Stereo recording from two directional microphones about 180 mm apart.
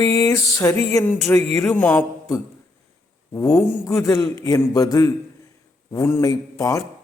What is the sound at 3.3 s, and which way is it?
A man's voice, 15° left (ahead or behind).